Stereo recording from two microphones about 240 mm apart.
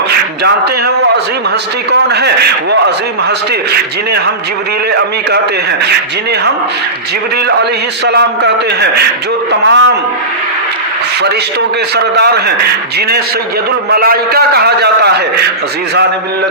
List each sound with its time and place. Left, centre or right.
0.4 s a man's voice: right
7.4 s a man's voice: right
12.1 s a man's voice: right
13.9 s a man's voice: right